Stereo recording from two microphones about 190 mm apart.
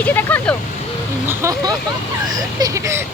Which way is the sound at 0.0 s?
10° left (ahead or behind).